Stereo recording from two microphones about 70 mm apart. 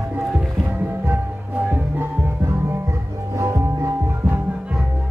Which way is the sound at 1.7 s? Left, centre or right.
Right.